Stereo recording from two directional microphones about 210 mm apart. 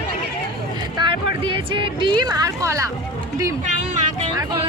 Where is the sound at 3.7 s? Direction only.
35° right (ahead or behind).